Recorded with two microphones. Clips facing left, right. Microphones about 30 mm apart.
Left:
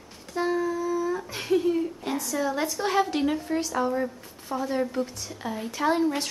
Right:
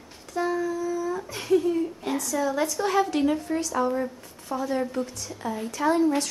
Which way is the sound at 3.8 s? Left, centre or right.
Centre.